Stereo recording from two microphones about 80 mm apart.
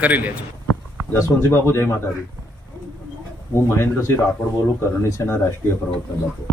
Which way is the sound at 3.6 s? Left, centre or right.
Left.